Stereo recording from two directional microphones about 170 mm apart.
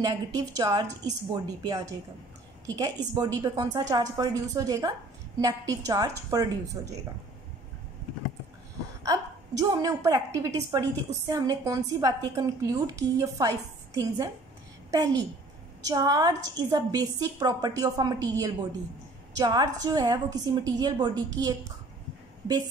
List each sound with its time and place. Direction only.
0.0 s a woman's voice: 25° right (ahead or behind)
9.0 s a woman's voice: 20° right (ahead or behind)